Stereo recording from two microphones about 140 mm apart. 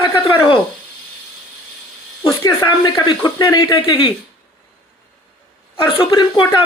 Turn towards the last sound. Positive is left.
turn(degrees=35)  # may be behind; listen again after turning